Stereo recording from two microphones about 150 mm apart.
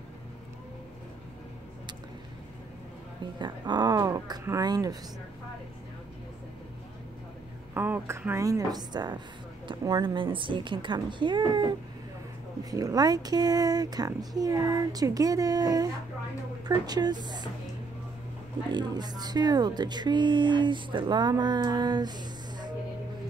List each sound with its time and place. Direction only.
3.3 s speech: 30° right (ahead or behind)
7.7 s a woman's voice: 15° right (ahead or behind); by 11.7 s 30° right (ahead or behind)
12.7 s speech: 25° right (ahead or behind)
18.7 s speech: 30° right (ahead or behind)